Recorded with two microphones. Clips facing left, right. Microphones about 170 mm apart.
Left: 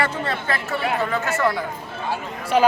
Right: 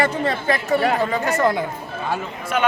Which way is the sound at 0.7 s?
40° right (ahead or behind).